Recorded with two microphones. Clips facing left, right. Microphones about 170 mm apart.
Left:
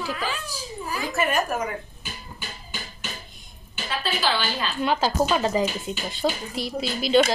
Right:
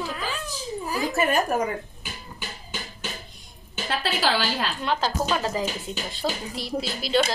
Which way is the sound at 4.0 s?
70° right (ahead or behind).